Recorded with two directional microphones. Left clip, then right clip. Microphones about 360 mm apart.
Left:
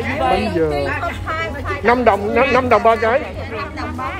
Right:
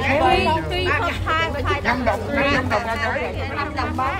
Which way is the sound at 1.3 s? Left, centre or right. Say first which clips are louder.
Right 4 dB; centre.